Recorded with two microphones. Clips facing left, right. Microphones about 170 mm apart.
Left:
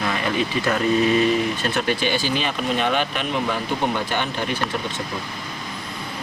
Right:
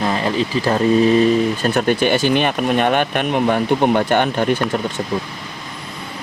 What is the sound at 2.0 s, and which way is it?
Speech, 60° right (ahead or behind).